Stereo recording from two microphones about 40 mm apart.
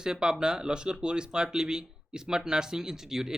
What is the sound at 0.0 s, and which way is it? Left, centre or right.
Speech, centre.